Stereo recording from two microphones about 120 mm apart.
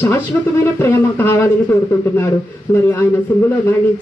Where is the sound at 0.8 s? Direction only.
20° left (ahead or behind).